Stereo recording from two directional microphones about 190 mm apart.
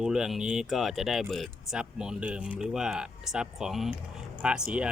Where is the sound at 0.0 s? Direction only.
5° right (ahead or behind).